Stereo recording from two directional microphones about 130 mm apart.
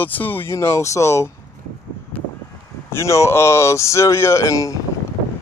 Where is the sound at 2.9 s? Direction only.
20° left (ahead or behind).